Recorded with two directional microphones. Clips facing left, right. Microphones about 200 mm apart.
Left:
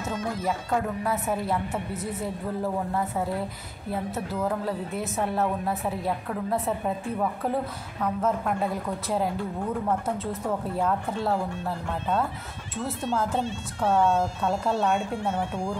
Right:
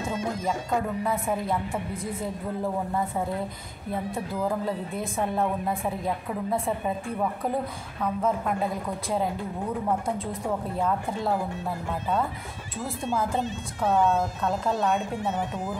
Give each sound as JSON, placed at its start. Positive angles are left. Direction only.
{"t": 1.0, "sound": "a woman's voice", "side_deg": 5}
{"t": 4.6, "sound": "a woman's voice", "side_deg": 5}
{"t": 8.0, "sound": "a woman's voice", "side_deg": -5}
{"t": 10.8, "sound": "a woman's voice", "side_deg": 5}
{"t": 13.0, "sound": "speech", "side_deg": -10}
{"t": 14.0, "sound": "speech", "side_deg": 10}
{"t": 14.7, "sound": "a woman's voice", "side_deg": 0}